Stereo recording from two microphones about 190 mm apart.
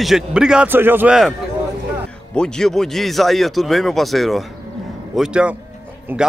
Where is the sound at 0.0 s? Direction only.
5° right (ahead or behind).